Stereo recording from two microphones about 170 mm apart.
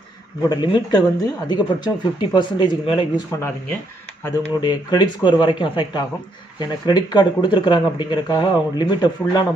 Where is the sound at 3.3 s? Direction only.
15° left (ahead or behind).